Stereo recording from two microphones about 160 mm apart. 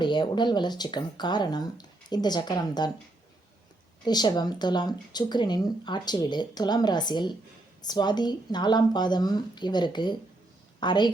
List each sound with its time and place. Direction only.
0.0 s speech: 30° left (ahead or behind)
4.0 s a woman's voice: 25° left (ahead or behind)